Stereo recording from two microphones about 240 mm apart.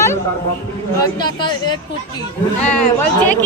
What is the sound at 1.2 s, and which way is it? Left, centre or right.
Speech, centre.